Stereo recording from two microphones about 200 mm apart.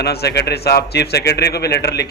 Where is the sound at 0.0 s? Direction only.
55° left (ahead or behind).